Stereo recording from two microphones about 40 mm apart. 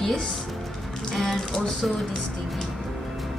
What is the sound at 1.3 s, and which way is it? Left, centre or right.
Speech, centre.